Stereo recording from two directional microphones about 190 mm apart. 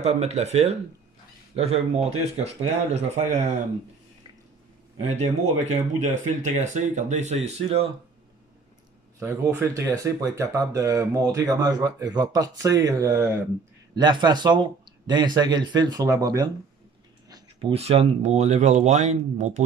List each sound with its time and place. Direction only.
0.0 s speech: 35° right (ahead or behind)
4.9 s speech: 35° right (ahead or behind)
9.6 s speech: 15° right (ahead or behind); by 19.6 s 40° right (ahead or behind)